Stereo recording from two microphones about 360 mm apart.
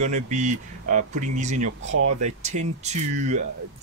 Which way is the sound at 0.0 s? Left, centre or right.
Centre.